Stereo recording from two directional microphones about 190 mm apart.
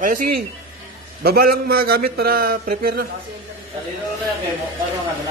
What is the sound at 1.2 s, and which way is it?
A man's voice, 50° right (ahead or behind).